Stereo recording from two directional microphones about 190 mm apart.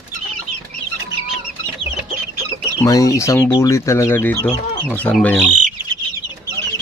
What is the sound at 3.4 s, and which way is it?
Speech, 25° left (ahead or behind).